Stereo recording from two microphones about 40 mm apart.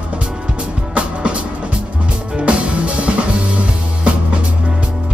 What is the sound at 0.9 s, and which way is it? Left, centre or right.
Music, right.